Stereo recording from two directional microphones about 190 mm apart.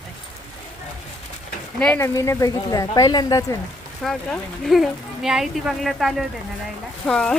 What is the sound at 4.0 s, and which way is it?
Speech, centre (ahead or behind).